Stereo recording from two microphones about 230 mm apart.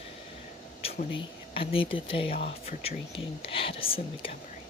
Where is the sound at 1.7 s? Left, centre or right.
Left.